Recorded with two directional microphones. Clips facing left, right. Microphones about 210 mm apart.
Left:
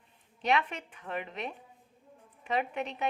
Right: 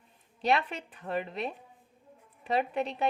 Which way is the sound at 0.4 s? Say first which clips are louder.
Right 1 dB; 35° right (ahead or behind).